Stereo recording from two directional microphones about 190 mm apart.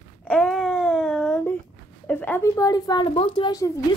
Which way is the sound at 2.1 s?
10° left (ahead or behind).